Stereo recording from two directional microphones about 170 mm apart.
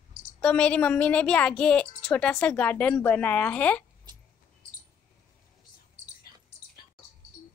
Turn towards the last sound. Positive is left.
turn(degrees=-40)  # may be behind; listen again after turning